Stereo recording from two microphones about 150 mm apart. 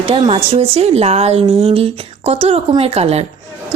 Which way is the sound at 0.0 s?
40° right (ahead or behind).